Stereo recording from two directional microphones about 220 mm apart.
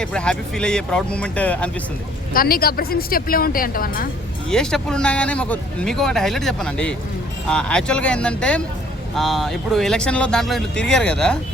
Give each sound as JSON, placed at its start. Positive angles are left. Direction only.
{"t": 0.0, "sound": "speech", "side_deg": 5}
{"t": 2.3, "sound": "speech", "side_deg": 40}
{"t": 4.4, "sound": "speech", "side_deg": 5}